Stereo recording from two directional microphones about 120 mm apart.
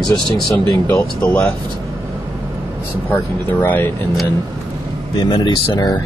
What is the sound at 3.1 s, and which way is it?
Speech, 15° left (ahead or behind).